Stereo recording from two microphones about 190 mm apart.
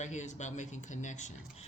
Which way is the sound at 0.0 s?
40° left (ahead or behind).